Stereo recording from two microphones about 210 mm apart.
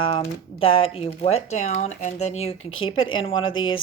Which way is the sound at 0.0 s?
25° left (ahead or behind).